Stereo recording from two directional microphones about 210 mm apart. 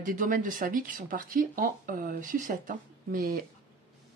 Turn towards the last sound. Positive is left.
turn(degrees=-45)  # may be behind; listen again after turning